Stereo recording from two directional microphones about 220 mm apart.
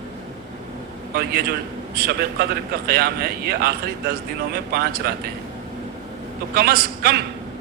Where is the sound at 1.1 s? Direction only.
45° right (ahead or behind).